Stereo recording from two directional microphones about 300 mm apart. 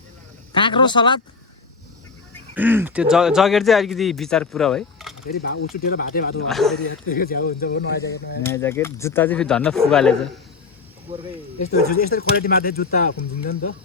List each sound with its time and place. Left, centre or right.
0.5 s speech: centre
2.6 s speech: centre
5.3 s speech: left
6.5 s speech: centre
7.1 s speech: left
8.4 s speech: centre
11.1 s speech: centre
11.6 s speech: left
13.5 s speech: left